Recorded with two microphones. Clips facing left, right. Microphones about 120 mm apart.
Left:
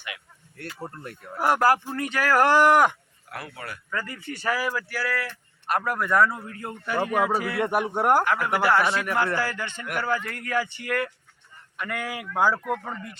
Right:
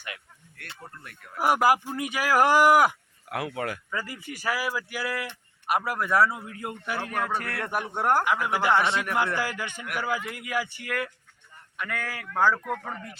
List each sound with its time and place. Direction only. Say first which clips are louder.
0.8 s speech: left 8 dB; 35° left (ahead or behind)
1.4 s speech: left 1 dB; 10° right (ahead or behind)
3.2 s speech: right 7 dB; 90° right
3.9 s speech: left 2 dB; 10° right (ahead or behind)
7.0 s speech: left 7 dB; 5° left (ahead or behind)
8.2 s speech: left 2 dB; 10° right (ahead or behind); by 12.0 s 5° left (ahead or behind)
12.0 s speech: left 1 dB; 15° left (ahead or behind)